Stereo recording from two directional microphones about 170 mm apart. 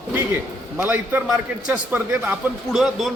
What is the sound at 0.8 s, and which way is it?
A man's voice, 10° right (ahead or behind).